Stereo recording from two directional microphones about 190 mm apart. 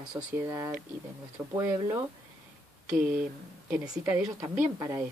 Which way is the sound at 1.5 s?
20° right (ahead or behind).